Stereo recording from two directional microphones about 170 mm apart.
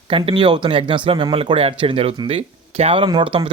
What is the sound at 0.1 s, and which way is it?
Speech, 30° right (ahead or behind).